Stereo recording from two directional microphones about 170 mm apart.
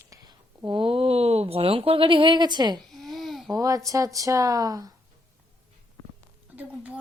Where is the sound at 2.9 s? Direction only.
Centre (ahead or behind).